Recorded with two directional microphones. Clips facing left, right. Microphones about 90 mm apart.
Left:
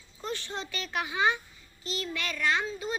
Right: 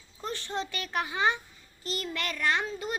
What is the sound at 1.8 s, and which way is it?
Speech, 50° right (ahead or behind).